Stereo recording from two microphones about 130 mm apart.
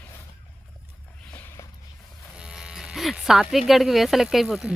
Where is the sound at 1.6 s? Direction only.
25° left (ahead or behind).